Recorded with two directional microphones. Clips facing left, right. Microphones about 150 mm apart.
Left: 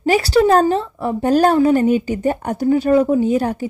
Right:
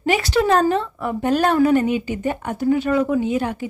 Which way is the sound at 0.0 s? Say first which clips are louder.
Left 5 dB; 35° left (ahead or behind).